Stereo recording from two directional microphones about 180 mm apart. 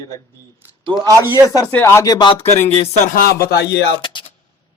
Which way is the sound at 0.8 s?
20° right (ahead or behind).